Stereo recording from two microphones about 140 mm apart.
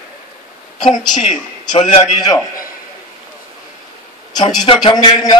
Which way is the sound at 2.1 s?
30° left (ahead or behind).